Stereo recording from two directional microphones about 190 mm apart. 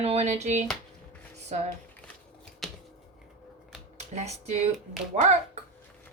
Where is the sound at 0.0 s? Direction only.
35° right (ahead or behind).